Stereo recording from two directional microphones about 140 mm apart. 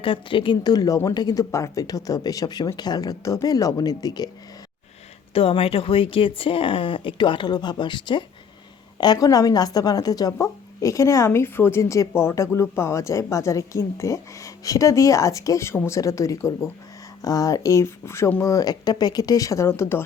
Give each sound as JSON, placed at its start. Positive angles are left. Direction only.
{"t": 0.0, "sound": "a woman's voice", "side_deg": 40}
{"t": 5.3, "sound": "a woman's voice", "side_deg": 40}